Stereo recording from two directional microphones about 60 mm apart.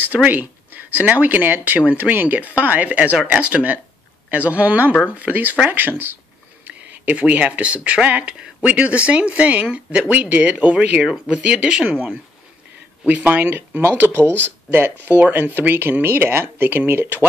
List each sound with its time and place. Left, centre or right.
0.0 s speech: right
13.0 s speech: right